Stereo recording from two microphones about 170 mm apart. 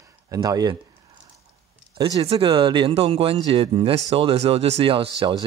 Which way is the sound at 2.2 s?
35° right (ahead or behind).